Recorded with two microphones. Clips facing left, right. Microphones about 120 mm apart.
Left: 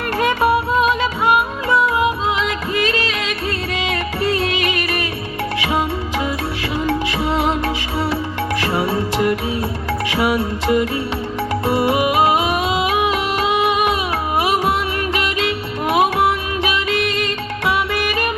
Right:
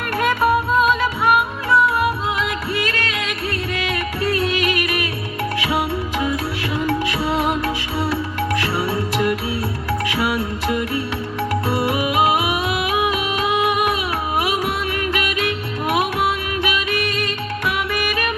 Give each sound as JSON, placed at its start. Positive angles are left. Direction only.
{"t": 2.8, "sound": "music", "side_deg": 25}
{"t": 7.3, "sound": "music", "side_deg": 20}
{"t": 8.7, "sound": "music", "side_deg": 20}
{"t": 15.1, "sound": "music", "side_deg": 25}
{"t": 17.7, "sound": "music", "side_deg": 25}